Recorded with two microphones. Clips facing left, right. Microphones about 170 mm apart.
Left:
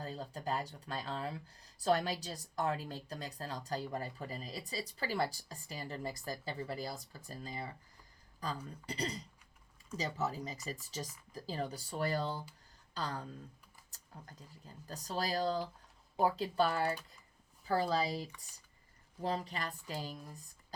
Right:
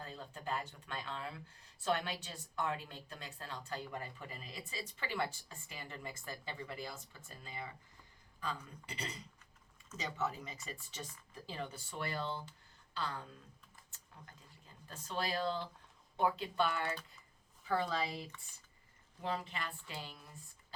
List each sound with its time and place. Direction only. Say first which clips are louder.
0.0 s speech: left 5 dB; 35° left (ahead or behind)